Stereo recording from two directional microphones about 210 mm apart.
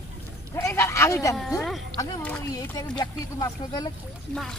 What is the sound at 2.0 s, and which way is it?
Speech, 10° left (ahead or behind).